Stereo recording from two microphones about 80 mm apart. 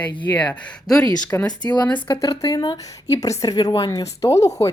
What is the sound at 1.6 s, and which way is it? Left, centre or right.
Speech, left.